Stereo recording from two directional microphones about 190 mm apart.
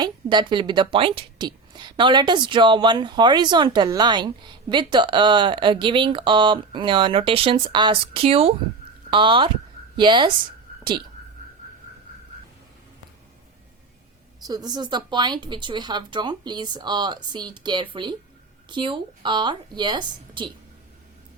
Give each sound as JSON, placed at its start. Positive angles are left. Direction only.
{"t": 0.0, "sound": "a woman's voice", "side_deg": -25}
{"t": 14.4, "sound": "a woman's voice", "side_deg": -20}